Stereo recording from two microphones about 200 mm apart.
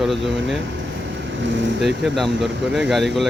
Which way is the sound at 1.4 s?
65° right (ahead or behind).